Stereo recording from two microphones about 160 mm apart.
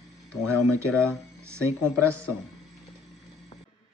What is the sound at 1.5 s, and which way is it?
Speech, 15° right (ahead or behind).